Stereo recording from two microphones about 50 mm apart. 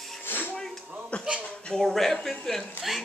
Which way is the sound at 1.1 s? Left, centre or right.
Left.